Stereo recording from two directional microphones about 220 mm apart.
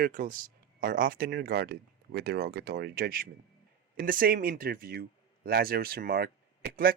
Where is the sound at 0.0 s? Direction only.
40° right (ahead or behind).